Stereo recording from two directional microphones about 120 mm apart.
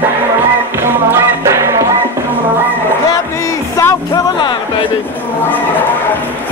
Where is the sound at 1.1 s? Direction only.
25° right (ahead or behind).